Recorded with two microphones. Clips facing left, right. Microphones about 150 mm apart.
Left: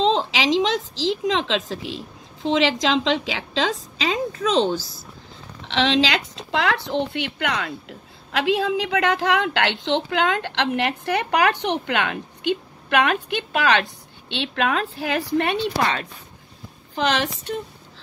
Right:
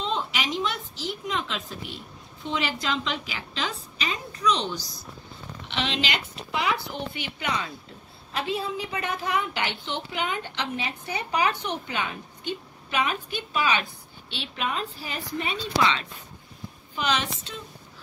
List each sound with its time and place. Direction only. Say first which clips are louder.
0.0 s a woman's voice: left 9 dB; 90° left
5.7 s a woman's voice: left 9 dB; 90° left; by 7.7 s 70° left (ahead or behind)
8.3 s a woman's voice: left 8 dB; 90° left; by 13.8 s 70° left (ahead or behind)
14.5 s a woman's voice: left 7 dB; 90° left; by 16.1 s 50° left (ahead or behind)
16.9 s a woman's voice: left 5 dB; 70° left (ahead or behind)